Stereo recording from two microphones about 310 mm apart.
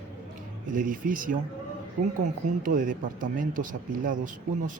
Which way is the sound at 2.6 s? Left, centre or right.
Right.